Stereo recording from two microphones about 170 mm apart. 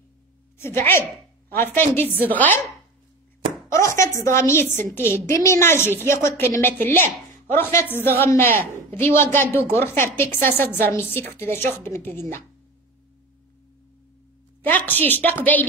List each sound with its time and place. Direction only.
0.6 s a woman's voice: 15° left (ahead or behind)
3.5 s chopping: 15° left (ahead or behind)
4.9 s a man's voice: 15° left (ahead or behind)
14.9 s a man's voice: 10° left (ahead or behind)